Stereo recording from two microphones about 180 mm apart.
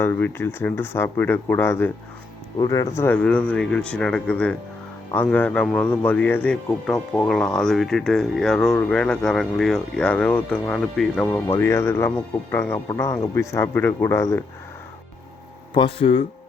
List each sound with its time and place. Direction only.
0.0 s speech: 10° left (ahead or behind)
15.7 s speech: 30° left (ahead or behind)